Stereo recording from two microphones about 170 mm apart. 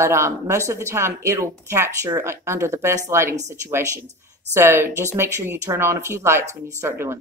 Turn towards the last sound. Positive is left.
turn(degrees=-15)  # may be behind; listen again after turning